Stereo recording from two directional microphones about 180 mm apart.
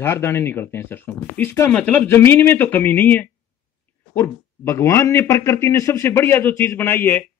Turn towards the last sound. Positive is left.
turn(degrees=10)  # may be behind; listen again after turning